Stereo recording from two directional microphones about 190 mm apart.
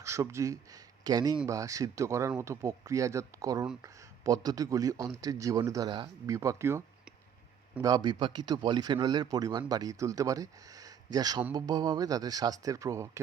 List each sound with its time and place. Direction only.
0.0 s a man's voice: 15° right (ahead or behind)